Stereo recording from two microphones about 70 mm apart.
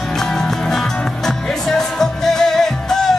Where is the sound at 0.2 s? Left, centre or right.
Centre.